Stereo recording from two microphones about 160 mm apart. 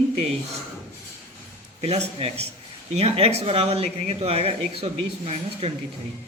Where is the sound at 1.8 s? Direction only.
40° right (ahead or behind).